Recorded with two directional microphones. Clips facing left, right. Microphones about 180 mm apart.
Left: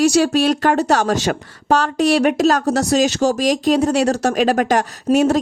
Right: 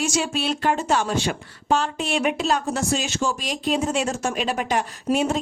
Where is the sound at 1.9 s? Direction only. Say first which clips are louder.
Left 9 dB; 40° left (ahead or behind).